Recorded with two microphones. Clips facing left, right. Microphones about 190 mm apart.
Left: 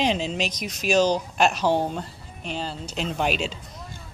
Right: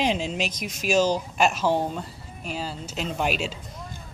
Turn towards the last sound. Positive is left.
turn(degrees=-5)  # may be behind; listen again after turning